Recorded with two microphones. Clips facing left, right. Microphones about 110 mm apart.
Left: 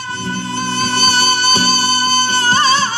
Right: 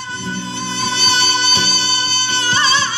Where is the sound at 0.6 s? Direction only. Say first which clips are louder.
Left 6 dB; 50° left (ahead or behind).